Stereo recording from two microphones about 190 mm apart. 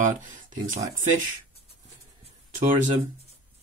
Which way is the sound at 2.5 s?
40° right (ahead or behind).